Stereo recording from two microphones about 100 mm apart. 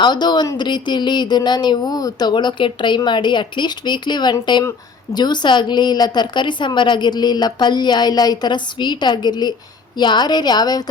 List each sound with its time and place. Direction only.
0.0 s a woman's voice: 45° left (ahead or behind)